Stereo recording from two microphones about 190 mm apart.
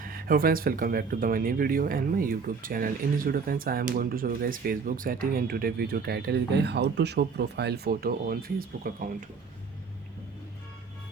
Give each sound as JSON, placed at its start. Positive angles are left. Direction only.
{"t": 0.0, "sound": "speech", "side_deg": -50}